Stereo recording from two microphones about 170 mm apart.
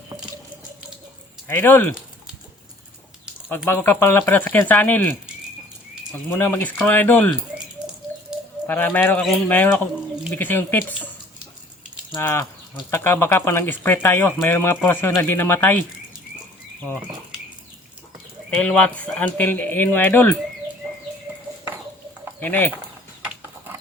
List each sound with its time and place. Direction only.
1.5 s speech: 10° left (ahead or behind)
3.7 s speech: 10° left (ahead or behind)
6.3 s speech: 15° left (ahead or behind)
8.6 s speech: 10° left (ahead or behind)
12.1 s speech: 15° left (ahead or behind)
18.6 s speech: 10° left (ahead or behind)
22.4 s speech: 10° left (ahead or behind)